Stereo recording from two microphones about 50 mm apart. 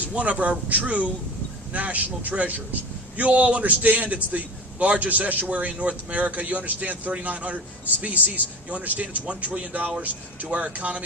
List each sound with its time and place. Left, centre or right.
0.1 s a man's voice: right